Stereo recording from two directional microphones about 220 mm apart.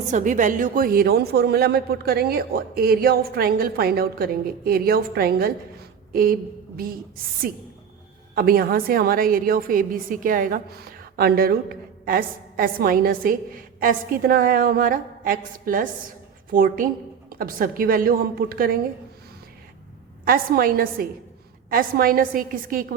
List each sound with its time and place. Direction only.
0.1 s speech: 35° right (ahead or behind)
6.7 s a woman's voice: 40° right (ahead or behind)
20.2 s a woman's voice: 40° right (ahead or behind)